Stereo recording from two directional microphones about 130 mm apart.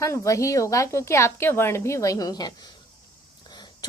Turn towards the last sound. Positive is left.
turn(degrees=35)  # may be behind; listen again after turning